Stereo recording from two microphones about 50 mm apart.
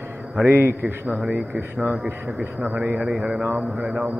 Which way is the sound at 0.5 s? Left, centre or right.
Right.